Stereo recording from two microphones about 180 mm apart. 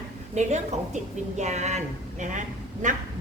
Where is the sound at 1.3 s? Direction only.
40° right (ahead or behind).